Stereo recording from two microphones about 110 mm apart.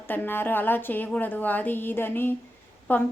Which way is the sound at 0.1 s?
20° left (ahead or behind).